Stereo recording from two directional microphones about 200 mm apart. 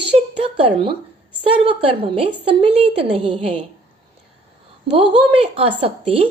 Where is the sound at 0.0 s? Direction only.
25° right (ahead or behind).